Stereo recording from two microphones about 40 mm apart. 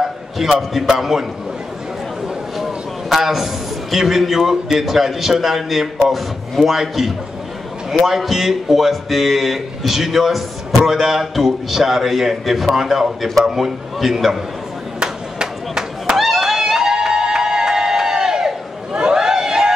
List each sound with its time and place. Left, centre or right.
0.0 s a man's voice: centre
2.5 s a sound: centre
3.9 s speech: centre
15.0 s chop: centre
16.2 s music: centre
18.9 s a sound: centre